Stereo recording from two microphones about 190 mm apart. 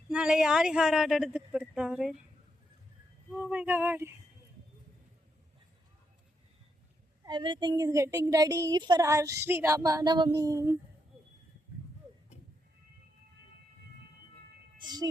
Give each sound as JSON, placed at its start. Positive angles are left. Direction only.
{"t": 0.1, "sound": "speech", "side_deg": -5}
{"t": 3.3, "sound": "child singing", "side_deg": -10}
{"t": 7.3, "sound": "speech", "side_deg": -25}
{"t": 8.6, "sound": "child singing", "side_deg": -20}